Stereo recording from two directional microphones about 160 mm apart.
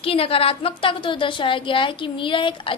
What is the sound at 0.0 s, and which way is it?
A woman's voice, 35° left (ahead or behind).